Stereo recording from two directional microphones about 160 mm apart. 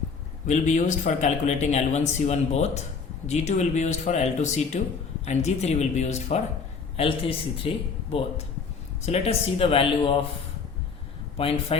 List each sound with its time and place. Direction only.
0.4 s speech: 45° left (ahead or behind)
9.0 s speech: 40° left (ahead or behind)
11.3 s speech: 35° left (ahead or behind)